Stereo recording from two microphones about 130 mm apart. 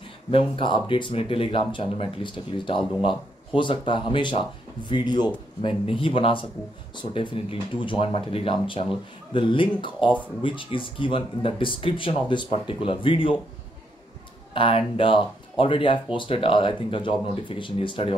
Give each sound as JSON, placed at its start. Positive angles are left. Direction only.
{"t": 0.3, "sound": "speech", "side_deg": 40}
{"t": 14.5, "sound": "speech", "side_deg": 45}